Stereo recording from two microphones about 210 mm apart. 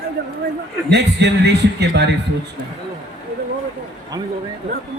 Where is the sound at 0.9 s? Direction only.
55° right (ahead or behind).